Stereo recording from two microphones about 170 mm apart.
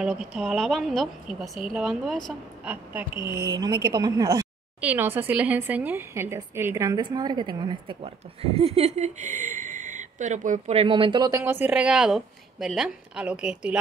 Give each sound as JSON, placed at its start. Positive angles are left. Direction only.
{"t": 0.0, "sound": "speech", "side_deg": 0}
{"t": 3.5, "sound": "a woman's voice", "side_deg": -25}